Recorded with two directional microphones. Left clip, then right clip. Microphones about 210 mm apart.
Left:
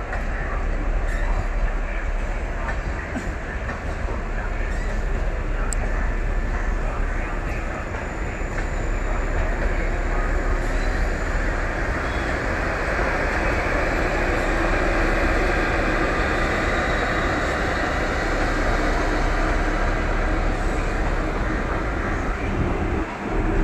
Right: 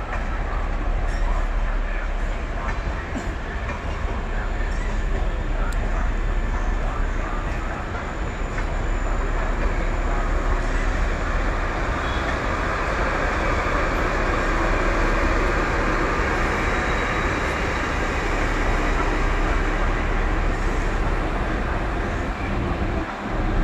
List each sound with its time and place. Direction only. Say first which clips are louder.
13.2 s vehicle: even; centre (ahead or behind); by 18.4 s 15° right (ahead or behind)